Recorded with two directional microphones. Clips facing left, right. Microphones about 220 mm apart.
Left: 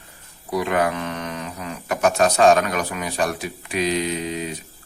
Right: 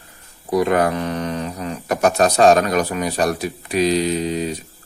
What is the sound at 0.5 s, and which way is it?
Speech, 40° right (ahead or behind).